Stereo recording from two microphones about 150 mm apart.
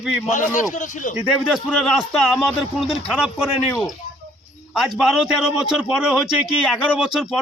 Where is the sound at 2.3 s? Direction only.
Centre (ahead or behind).